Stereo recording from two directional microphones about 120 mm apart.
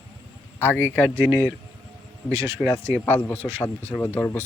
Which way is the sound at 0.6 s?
20° left (ahead or behind).